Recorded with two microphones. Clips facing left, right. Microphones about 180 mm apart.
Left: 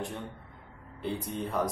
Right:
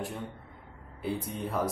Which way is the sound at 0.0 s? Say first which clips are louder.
Even; 5° right (ahead or behind).